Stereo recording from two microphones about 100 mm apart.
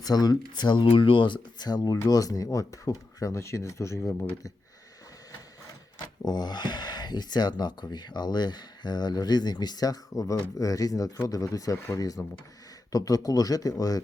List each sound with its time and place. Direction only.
0.0 s speech: 40° left (ahead or behind); by 4.3 s 25° left (ahead or behind)
6.2 s speech: 45° left (ahead or behind)